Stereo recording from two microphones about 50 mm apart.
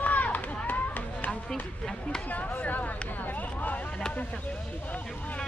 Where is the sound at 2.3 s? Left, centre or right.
Left.